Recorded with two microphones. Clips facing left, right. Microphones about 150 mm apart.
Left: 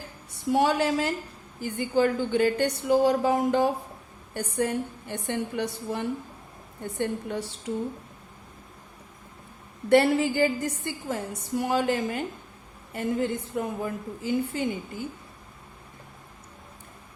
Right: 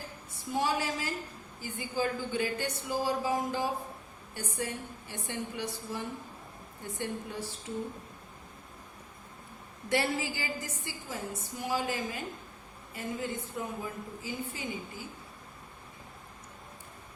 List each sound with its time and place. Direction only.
0.5 s a woman's voice: 65° left (ahead or behind)
9.9 s a woman's voice: 55° left (ahead or behind)